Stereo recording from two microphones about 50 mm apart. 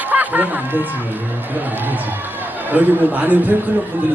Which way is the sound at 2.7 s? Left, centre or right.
Right.